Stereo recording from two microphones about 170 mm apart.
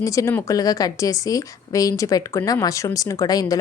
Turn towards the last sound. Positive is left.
turn(degrees=20)  # may be behind; listen again after turning